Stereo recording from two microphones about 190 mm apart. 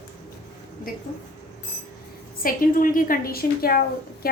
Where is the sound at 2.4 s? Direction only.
45° left (ahead or behind).